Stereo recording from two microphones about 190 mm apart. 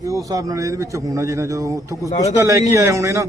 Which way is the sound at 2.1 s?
35° left (ahead or behind).